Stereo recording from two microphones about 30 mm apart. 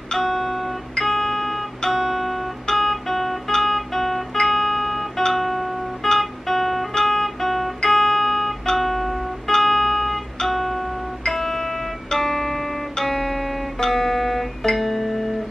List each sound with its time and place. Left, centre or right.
0.2 s music: centre
2.7 s guitar: centre
6.9 s guitar: centre
7.8 s music: centre